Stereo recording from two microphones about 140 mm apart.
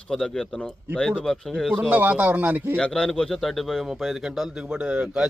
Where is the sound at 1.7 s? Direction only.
10° right (ahead or behind).